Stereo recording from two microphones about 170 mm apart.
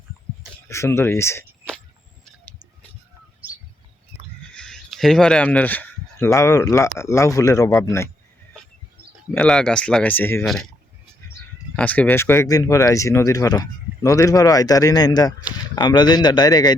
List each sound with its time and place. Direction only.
0.7 s speech: 15° left (ahead or behind)
4.5 s speech: 5° left (ahead or behind)
9.3 s speech: 5° left (ahead or behind)
11.8 s speech: 10° left (ahead or behind)